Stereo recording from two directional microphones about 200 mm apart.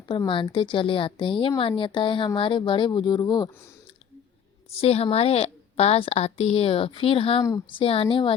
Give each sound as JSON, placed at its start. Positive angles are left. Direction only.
{"t": 0.1, "sound": "a woman's voice", "side_deg": 25}
{"t": 4.8, "sound": "a woman's voice", "side_deg": 30}